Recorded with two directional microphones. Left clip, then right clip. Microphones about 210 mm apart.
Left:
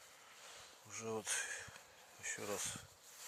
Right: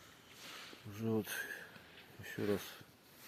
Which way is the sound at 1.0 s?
15° left (ahead or behind).